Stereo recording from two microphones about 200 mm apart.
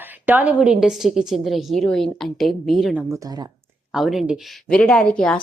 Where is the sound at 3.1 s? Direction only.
15° right (ahead or behind).